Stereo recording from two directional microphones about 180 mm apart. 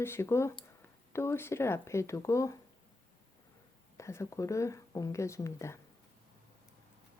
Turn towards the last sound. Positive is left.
turn(degrees=15)  # may be behind; listen again after turning